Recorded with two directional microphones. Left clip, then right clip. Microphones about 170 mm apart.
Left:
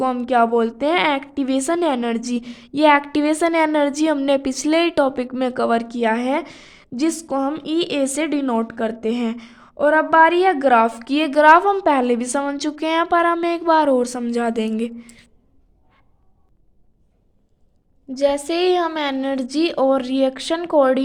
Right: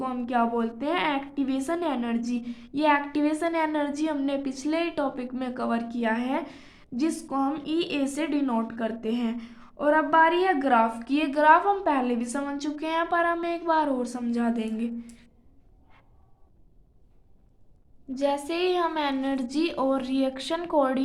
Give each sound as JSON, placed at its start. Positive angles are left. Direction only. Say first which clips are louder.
{"t": 0.0, "sound": "a woman's voice", "louder": "left 9 dB", "side_deg": 65}
{"t": 18.1, "sound": "a woman's voice", "louder": "left 8 dB", "side_deg": 45}